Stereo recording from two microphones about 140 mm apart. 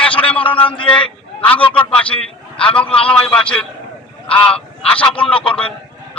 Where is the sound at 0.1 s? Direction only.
40° left (ahead or behind).